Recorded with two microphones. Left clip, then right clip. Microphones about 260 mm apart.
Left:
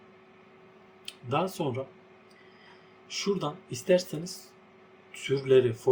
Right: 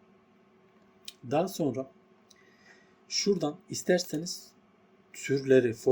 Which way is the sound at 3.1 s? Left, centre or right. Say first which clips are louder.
Right 2 dB; right.